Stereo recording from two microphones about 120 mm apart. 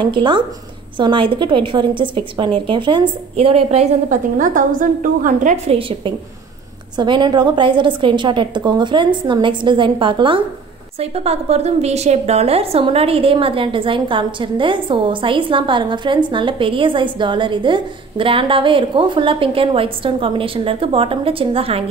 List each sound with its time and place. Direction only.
0.0 s a woman's voice: 40° right (ahead or behind); by 5.6 s 90° right
5.7 s a woman's voice: 45° right (ahead or behind)
11.0 s a woman's voice: 60° right (ahead or behind)